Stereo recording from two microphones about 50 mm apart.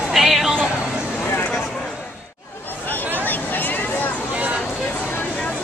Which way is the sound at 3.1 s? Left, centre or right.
Left.